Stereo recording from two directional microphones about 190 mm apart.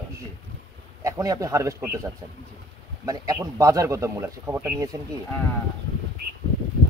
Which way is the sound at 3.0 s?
20° right (ahead or behind).